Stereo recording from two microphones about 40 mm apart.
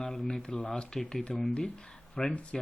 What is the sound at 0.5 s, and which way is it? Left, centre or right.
Speech, left.